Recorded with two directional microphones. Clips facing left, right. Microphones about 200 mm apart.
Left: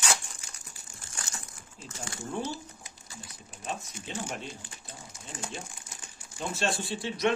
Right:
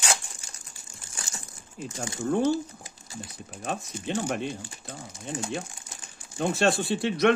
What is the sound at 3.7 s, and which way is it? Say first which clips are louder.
Speech: right 7 dB; 60° right (ahead or behind).